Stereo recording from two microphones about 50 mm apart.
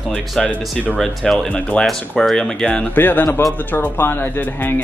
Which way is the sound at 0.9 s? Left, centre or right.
Centre.